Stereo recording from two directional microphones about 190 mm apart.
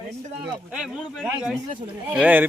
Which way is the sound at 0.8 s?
Centre (ahead or behind).